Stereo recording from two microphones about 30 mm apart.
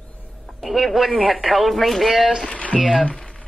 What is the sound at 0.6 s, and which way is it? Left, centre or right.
Speech, centre.